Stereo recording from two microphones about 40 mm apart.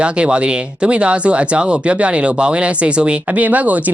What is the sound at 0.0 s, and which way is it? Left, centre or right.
Speech, right.